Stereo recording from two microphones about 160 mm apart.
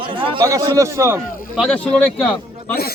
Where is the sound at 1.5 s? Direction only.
5° left (ahead or behind).